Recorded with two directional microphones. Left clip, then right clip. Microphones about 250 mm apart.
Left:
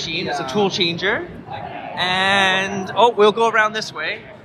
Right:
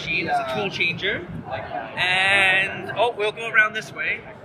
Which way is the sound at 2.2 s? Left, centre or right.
Centre.